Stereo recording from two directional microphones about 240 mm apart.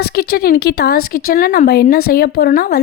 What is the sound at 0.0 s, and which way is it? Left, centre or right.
Speech, left.